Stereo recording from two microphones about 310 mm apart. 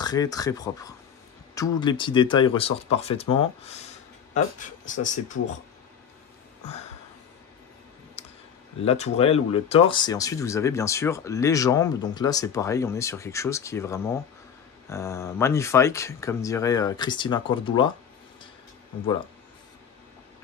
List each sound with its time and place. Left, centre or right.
0.0 s speech: centre
8.2 s a sound: centre
8.8 s speech: centre